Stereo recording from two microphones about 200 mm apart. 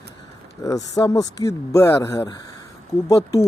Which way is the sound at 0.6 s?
15° left (ahead or behind).